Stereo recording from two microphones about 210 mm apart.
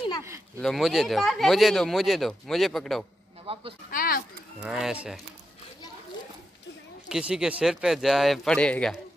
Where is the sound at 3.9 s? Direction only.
45° left (ahead or behind).